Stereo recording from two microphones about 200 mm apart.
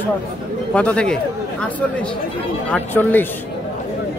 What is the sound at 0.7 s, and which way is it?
Speech, 5° left (ahead or behind).